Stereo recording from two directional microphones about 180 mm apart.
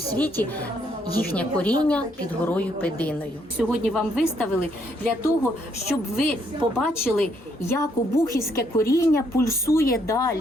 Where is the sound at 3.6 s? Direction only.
5° right (ahead or behind).